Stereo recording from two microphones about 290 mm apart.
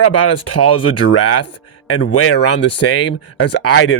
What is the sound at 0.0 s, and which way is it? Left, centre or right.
Speech, left.